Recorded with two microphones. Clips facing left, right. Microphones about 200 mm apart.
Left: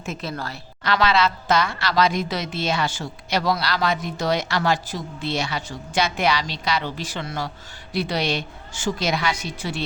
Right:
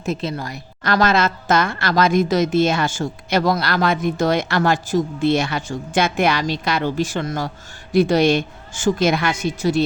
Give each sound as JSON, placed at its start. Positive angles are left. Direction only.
{"t": 0.2, "sound": "a woman's voice", "side_deg": -20}
{"t": 0.9, "sound": "a woman's voice", "side_deg": -45}